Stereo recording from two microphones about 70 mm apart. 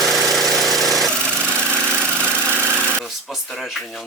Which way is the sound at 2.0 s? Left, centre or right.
Right.